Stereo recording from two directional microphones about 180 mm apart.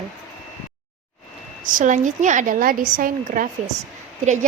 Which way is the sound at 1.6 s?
45° right (ahead or behind).